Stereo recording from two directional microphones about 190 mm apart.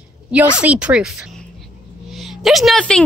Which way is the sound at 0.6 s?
5° right (ahead or behind).